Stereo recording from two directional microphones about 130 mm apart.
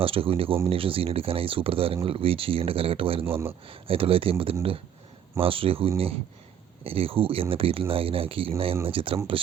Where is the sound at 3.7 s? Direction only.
45° right (ahead or behind).